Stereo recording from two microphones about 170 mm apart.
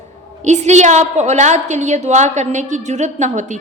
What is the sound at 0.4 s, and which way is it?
A woman's voice, 45° right (ahead or behind).